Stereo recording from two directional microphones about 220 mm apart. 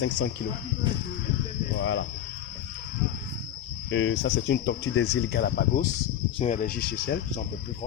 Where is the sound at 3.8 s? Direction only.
60° left (ahead or behind).